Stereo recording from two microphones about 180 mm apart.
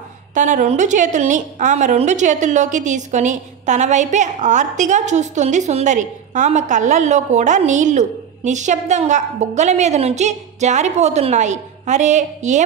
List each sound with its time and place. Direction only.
0.3 s a woman's voice: 45° right (ahead or behind)